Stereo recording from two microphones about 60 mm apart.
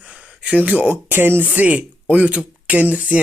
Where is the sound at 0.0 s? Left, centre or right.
Right.